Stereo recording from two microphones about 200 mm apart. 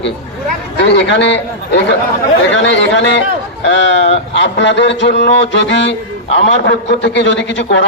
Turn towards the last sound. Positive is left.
turn(degrees=65)  # may be behind; listen again after turning